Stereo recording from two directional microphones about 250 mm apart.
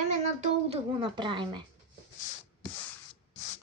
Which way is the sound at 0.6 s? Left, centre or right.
Centre.